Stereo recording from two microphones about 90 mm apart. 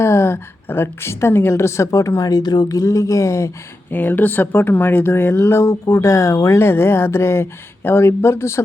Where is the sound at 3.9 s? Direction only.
20° left (ahead or behind).